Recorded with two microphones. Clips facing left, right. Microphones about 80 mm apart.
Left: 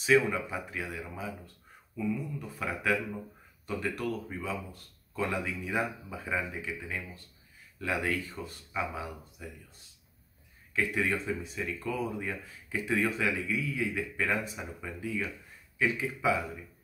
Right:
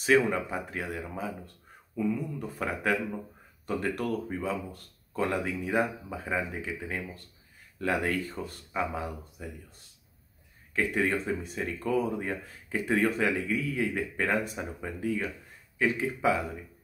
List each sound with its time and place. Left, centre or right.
0.0 s speech: right
10.7 s speech: right